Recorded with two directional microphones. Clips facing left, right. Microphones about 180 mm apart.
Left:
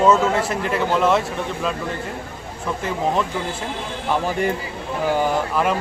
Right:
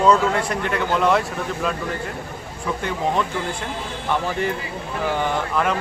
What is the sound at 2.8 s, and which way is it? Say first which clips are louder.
Speech: left 1 dB; centre (ahead or behind).